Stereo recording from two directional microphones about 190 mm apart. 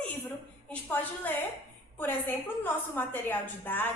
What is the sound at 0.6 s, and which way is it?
A woman's voice, 10° left (ahead or behind).